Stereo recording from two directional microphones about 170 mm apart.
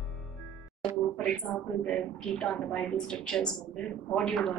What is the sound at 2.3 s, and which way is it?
A woman's voice, 5° left (ahead or behind).